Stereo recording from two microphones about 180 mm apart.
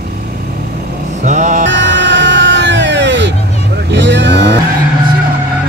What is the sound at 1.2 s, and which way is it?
Mantra, 40° right (ahead or behind).